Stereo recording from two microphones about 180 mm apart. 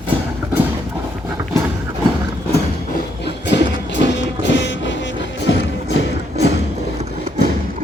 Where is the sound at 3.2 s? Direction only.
75° left (ahead or behind).